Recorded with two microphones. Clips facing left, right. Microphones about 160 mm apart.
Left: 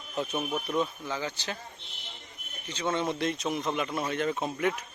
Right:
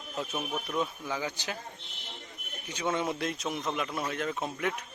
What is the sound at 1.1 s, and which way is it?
Speech, 10° right (ahead or behind).